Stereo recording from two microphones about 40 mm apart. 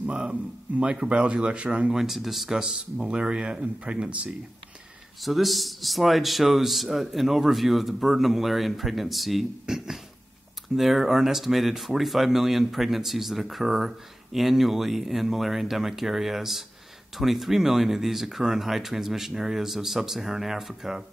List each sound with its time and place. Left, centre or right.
0.3 s speech: right
1.9 s speech: centre
3.1 s speech: right
5.2 s speech: centre